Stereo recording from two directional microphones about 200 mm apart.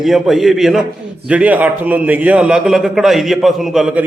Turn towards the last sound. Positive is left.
turn(degrees=0)  # may be behind; listen again after turning